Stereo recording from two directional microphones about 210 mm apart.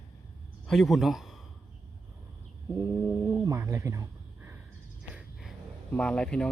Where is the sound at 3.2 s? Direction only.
10° right (ahead or behind).